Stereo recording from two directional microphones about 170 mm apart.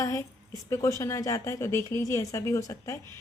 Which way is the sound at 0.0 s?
20° left (ahead or behind).